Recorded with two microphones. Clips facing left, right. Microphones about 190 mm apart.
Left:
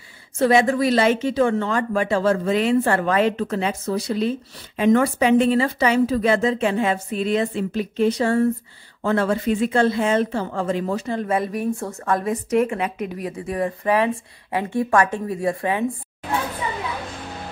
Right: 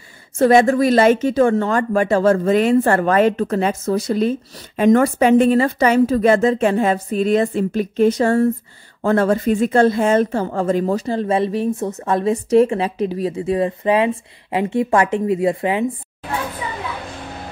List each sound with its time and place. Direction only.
0.4 s a woman's voice: 45° right (ahead or behind); by 15.8 s 20° right (ahead or behind)